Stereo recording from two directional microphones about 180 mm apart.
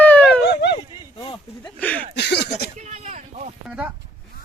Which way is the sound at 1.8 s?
10° left (ahead or behind).